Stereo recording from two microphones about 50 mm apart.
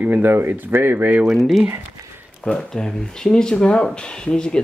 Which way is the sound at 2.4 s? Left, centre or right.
Centre.